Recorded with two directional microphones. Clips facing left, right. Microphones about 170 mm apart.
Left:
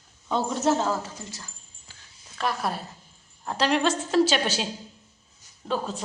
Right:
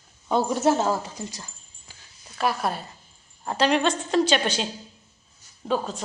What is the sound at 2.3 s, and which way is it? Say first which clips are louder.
A woman's voice: right 3 dB; 5° right (ahead or behind).